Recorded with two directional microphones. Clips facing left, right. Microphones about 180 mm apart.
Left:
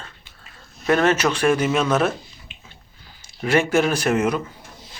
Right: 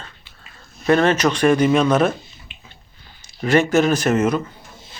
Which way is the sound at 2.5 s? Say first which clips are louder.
Even; 45° left (ahead or behind).